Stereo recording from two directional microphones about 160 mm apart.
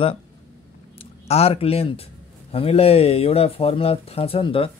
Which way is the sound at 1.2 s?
40° left (ahead or behind).